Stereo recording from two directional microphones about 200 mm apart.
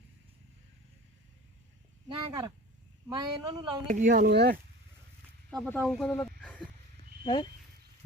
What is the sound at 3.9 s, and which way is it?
Speech, 40° right (ahead or behind).